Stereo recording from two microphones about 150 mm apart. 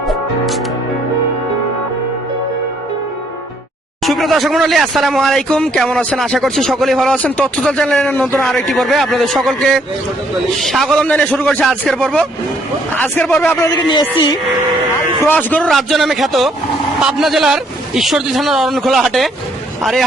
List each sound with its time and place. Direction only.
0.1 s music: centre (ahead or behind)
4.0 s a man's voice: centre (ahead or behind)
13.6 s speech: 30° left (ahead or behind)
15.3 s speech: 10° left (ahead or behind)